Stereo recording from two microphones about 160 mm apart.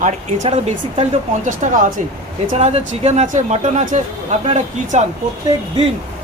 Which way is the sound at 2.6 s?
40° right (ahead or behind).